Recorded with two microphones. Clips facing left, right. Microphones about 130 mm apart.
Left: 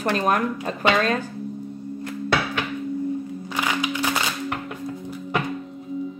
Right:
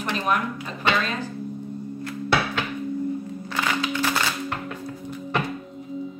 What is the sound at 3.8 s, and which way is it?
Music, 15° left (ahead or behind).